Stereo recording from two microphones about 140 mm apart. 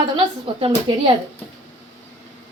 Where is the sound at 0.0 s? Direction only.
40° right (ahead or behind).